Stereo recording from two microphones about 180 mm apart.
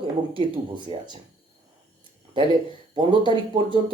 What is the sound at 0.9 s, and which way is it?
Speech, 30° right (ahead or behind).